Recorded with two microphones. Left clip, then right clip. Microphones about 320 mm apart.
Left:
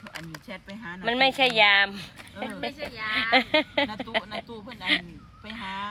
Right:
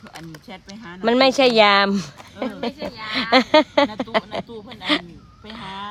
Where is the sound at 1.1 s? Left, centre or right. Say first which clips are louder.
Right 7 dB; right.